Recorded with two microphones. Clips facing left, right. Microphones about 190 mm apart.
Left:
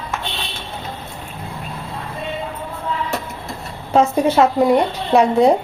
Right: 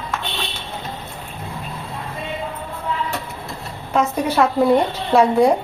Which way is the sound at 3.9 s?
25° left (ahead or behind).